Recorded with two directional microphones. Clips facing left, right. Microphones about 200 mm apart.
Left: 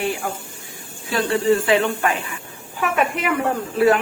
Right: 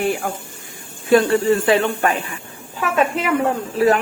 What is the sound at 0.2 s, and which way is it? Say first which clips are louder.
A woman's voice: right 2 dB; 50° right (ahead or behind).